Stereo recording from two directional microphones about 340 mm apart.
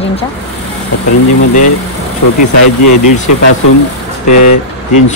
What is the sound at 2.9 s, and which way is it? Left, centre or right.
Speech, left.